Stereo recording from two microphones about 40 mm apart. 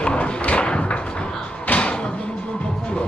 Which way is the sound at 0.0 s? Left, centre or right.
Left.